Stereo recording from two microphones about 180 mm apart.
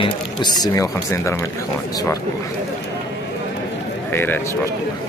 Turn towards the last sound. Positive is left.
turn(degrees=10)  # may be behind; listen again after turning